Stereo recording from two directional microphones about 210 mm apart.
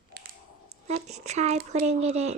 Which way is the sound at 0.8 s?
30° right (ahead or behind).